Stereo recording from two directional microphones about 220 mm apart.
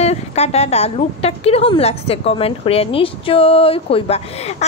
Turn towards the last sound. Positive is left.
turn(degrees=25)  # may be behind; listen again after turning